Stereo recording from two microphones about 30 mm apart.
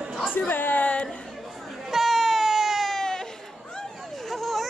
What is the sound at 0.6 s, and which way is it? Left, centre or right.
Speech, left.